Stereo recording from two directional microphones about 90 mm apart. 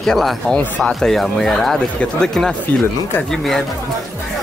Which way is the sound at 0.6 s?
15° left (ahead or behind).